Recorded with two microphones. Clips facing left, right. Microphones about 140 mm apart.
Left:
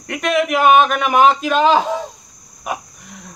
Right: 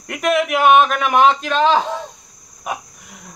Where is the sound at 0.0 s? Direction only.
Centre (ahead or behind).